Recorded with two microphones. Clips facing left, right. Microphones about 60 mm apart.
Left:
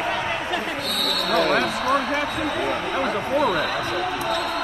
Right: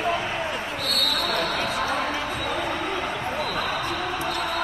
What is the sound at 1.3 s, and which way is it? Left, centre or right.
Basketball bounce, left.